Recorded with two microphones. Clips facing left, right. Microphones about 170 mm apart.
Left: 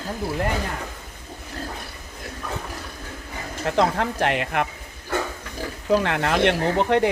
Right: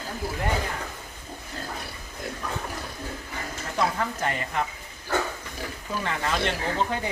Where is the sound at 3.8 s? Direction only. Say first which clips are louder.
Left 5 dB; 80° left.